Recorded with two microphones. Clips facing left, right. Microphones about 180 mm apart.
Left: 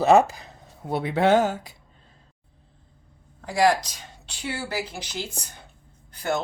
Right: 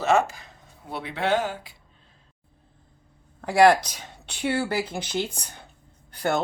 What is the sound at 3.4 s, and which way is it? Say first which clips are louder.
Speech: right 4 dB; 65° right (ahead or behind).